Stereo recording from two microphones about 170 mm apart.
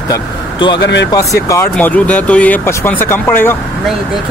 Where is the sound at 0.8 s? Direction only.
90° left.